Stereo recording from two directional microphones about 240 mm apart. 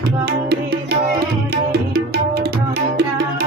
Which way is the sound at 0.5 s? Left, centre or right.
Right.